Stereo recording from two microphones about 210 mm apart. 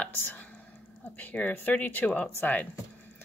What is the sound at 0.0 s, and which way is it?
Whispering, 10° left (ahead or behind).